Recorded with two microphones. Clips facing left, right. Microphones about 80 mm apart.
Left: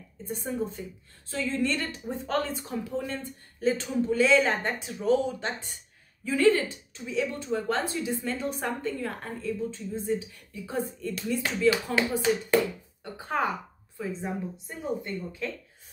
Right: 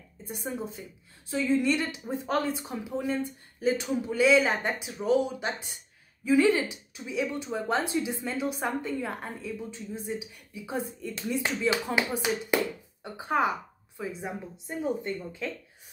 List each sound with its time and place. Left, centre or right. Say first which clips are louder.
0.3 s speech: left 3 dB; centre